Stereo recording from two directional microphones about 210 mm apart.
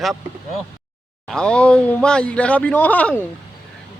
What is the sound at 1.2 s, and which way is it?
Speech, 5° left (ahead or behind).